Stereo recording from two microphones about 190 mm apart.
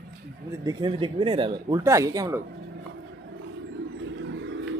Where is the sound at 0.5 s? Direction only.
20° right (ahead or behind).